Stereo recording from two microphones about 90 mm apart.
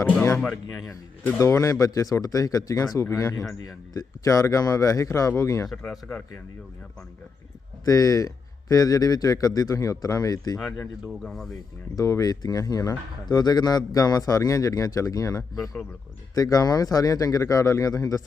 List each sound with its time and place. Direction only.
0.0 s music: 25° left (ahead or behind)
0.3 s speech: 5° left (ahead or behind)
1.4 s speech: 35° left (ahead or behind)
5.6 s speech: 5° left (ahead or behind)
7.9 s speech: 40° left (ahead or behind)
11.2 s speech: centre (ahead or behind)
11.9 s speech: 35° left (ahead or behind)